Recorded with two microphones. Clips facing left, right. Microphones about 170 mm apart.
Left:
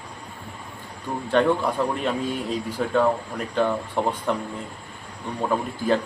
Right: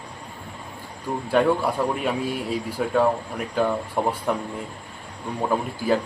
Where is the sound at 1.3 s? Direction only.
10° right (ahead or behind).